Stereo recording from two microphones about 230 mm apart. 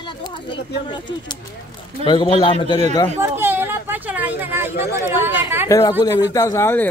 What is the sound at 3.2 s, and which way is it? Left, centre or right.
Speech, centre.